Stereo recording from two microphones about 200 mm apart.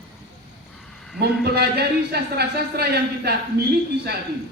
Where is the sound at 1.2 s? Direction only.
55° right (ahead or behind).